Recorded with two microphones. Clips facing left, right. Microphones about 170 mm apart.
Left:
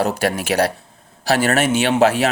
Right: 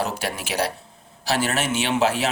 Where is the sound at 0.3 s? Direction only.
60° left (ahead or behind).